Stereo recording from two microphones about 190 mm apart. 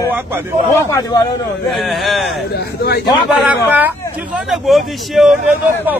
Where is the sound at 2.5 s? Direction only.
60° left (ahead or behind).